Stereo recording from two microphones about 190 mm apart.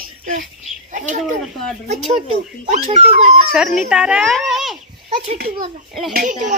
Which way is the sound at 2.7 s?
40° right (ahead or behind).